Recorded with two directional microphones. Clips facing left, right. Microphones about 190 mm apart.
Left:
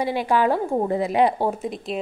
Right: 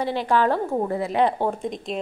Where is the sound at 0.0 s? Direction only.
10° left (ahead or behind).